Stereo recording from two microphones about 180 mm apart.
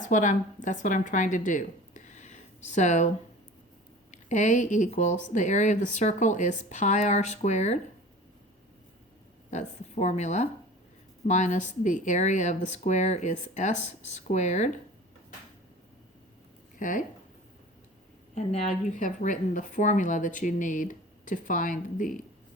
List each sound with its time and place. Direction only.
0.0 s a woman's voice: 45° left (ahead or behind)
4.1 s speech: 40° left (ahead or behind)
9.5 s speech: 40° left (ahead or behind)
18.3 s a woman's voice: 35° left (ahead or behind)